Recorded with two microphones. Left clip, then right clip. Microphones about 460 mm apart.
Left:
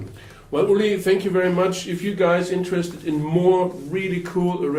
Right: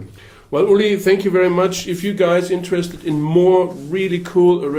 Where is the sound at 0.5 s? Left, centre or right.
Right.